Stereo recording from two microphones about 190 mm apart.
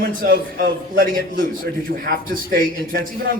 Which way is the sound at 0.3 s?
50° right (ahead or behind).